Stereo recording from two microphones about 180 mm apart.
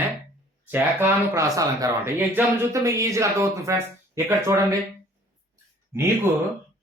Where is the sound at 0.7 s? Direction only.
10° right (ahead or behind).